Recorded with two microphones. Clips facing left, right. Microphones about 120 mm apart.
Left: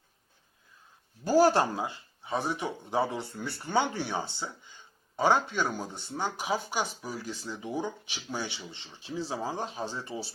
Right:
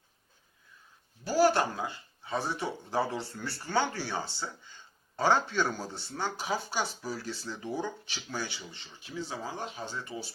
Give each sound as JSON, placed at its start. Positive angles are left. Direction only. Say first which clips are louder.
{"t": 1.2, "sound": "speech", "louder": "left 3 dB", "side_deg": 45}
{"t": 1.7, "sound": "speech", "louder": "left 2 dB", "side_deg": 20}